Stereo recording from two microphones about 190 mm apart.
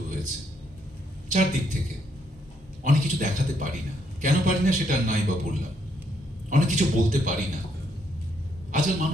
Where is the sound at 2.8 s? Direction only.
45° right (ahead or behind).